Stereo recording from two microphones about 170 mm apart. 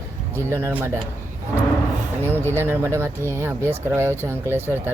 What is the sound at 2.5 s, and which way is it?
Speech, 15° right (ahead or behind).